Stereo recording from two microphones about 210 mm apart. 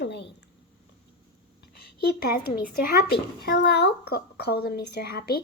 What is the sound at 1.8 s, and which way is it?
Speech, 50° left (ahead or behind).